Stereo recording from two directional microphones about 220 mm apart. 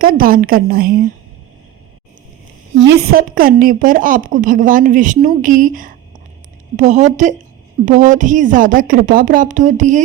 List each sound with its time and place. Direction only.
0.0 s a woman's voice: 40° right (ahead or behind)
2.7 s a woman's voice: 50° right (ahead or behind); by 10.0 s 35° right (ahead or behind)